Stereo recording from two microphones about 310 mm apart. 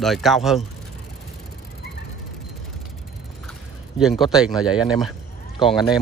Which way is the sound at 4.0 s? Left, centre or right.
Centre.